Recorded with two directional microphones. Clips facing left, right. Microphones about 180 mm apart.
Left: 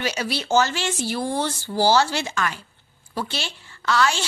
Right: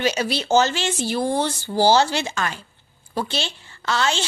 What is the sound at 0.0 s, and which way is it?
A woman's voice, 20° right (ahead or behind).